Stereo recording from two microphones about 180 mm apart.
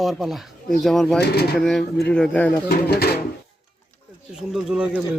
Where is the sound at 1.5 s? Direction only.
Centre (ahead or behind).